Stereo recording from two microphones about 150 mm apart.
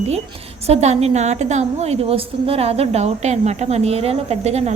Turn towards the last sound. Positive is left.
turn(degrees=-45)  # may be behind; listen again after turning